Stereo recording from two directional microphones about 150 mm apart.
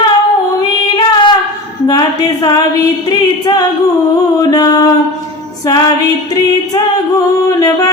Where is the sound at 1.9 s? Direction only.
30° left (ahead or behind).